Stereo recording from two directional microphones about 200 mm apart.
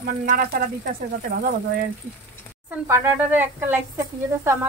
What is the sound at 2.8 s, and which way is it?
Speech, 15° right (ahead or behind).